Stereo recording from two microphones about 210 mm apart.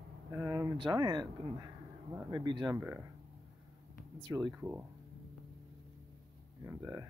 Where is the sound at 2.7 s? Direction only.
10° right (ahead or behind).